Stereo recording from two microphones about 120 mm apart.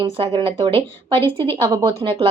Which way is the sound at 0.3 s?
50° right (ahead or behind).